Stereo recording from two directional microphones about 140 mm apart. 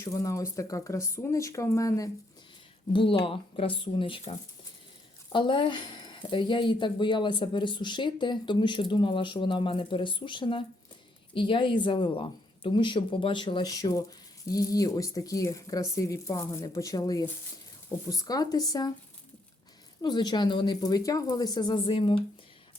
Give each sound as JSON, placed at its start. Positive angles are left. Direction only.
{"t": 0.0, "sound": "speech", "side_deg": 25}
{"t": 2.9, "sound": "speech", "side_deg": 40}
{"t": 20.0, "sound": "speech", "side_deg": 30}